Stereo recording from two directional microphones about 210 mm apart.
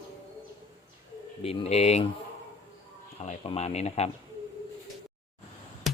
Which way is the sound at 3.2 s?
30° left (ahead or behind).